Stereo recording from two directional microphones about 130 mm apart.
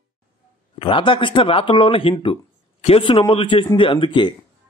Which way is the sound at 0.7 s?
40° left (ahead or behind).